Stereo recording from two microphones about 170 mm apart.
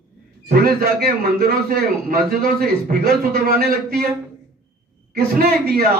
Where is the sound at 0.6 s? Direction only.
65° right (ahead or behind).